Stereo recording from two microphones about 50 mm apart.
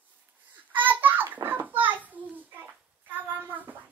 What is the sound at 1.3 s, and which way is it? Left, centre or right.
Children playing, right.